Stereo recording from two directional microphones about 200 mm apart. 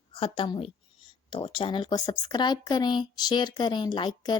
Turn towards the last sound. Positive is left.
turn(degrees=20)  # may be behind; listen again after turning